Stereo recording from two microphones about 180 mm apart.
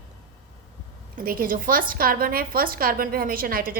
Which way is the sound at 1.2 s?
55° right (ahead or behind).